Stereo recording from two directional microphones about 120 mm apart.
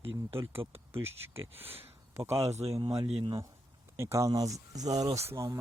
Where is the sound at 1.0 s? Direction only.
20° right (ahead or behind).